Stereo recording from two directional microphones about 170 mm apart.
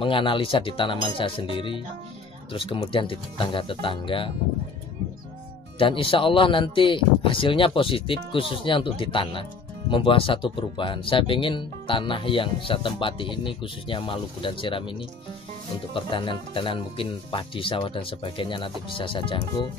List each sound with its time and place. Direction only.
0.0 s speech: 30° left (ahead or behind)
5.8 s speech: 30° left (ahead or behind)